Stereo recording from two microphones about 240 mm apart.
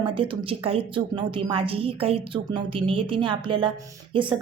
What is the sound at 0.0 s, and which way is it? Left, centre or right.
A woman's voice, right.